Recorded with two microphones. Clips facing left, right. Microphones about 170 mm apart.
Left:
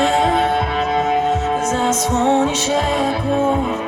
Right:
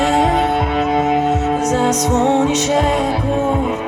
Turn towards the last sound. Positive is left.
turn(degrees=-20)  # may be behind; listen again after turning